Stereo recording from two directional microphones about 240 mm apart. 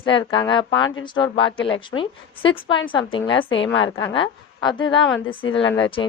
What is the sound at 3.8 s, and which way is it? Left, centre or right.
A woman's voice, centre.